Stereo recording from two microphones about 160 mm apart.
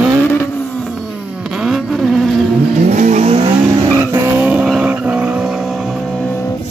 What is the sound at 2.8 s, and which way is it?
Vehicle, 50° right (ahead or behind).